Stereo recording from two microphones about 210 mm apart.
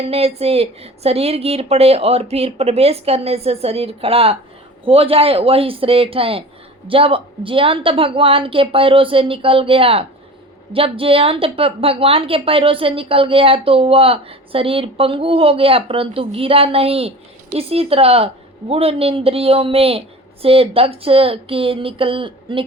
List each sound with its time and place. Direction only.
0.0 s a woman's voice: 30° right (ahead or behind)